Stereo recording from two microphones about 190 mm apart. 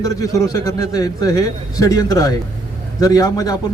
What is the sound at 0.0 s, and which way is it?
A man's voice, 15° left (ahead or behind).